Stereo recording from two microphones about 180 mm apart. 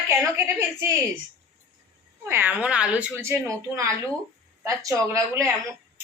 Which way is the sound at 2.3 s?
10° right (ahead or behind).